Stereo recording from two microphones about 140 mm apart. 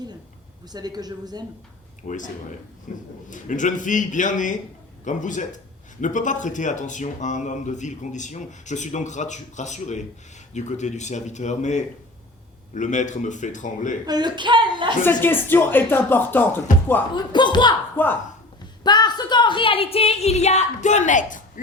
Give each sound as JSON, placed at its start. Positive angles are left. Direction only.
{"t": 0.7, "sound": "speech", "side_deg": -30}
{"t": 2.0, "sound": "speech", "side_deg": 65}
{"t": 14.1, "sound": "a woman's voice", "side_deg": -30}
{"t": 15.0, "sound": "speech", "side_deg": 15}
{"t": 17.2, "sound": "speech", "side_deg": 30}
{"t": 17.9, "sound": "speech", "side_deg": 15}
{"t": 18.8, "sound": "a woman's voice", "side_deg": 30}